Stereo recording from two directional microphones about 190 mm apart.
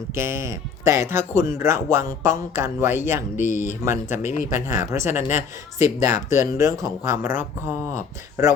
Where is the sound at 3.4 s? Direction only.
40° left (ahead or behind).